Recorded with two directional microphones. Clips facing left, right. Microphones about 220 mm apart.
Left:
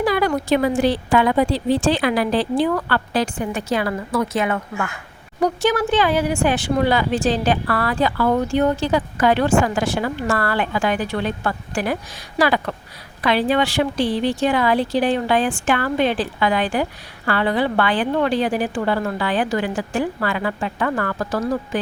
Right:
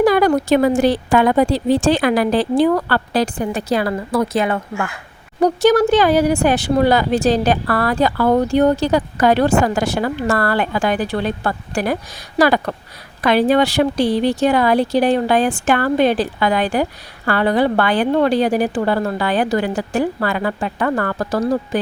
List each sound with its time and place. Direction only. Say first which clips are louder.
0.0 s a woman's voice: right 6 dB; 45° right (ahead or behind)